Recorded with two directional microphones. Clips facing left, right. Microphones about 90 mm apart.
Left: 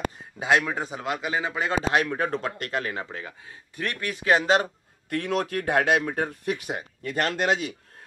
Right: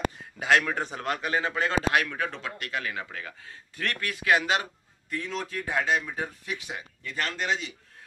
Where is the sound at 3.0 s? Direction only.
25° left (ahead or behind).